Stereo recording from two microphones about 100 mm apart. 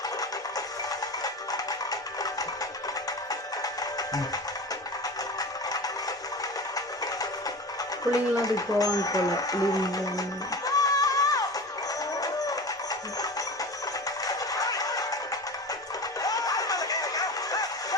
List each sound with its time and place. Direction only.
0.2 s music: 40° left (ahead or behind)
5.4 s music: 40° left (ahead or behind)
8.1 s speech: 35° left (ahead or behind)
12.2 s music: 35° left (ahead or behind)
14.3 s a sound: 35° left (ahead or behind)
16.2 s music: 35° left (ahead or behind)